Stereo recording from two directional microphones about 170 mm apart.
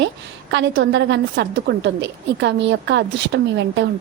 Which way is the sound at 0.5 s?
90° right.